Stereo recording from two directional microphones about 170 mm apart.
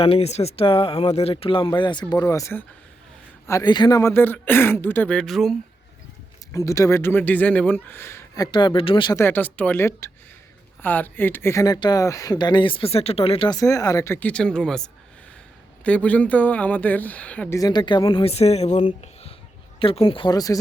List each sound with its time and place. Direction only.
0.0 s speech: 35° left (ahead or behind); by 5.5 s centre (ahead or behind)
6.5 s speech: 20° left (ahead or behind)
8.4 s speech: 25° left (ahead or behind)
9.1 s speech: 10° left (ahead or behind); by 13.6 s 30° left (ahead or behind)
13.6 s speech: 20° left (ahead or behind)
17.6 s speech: 25° left (ahead or behind)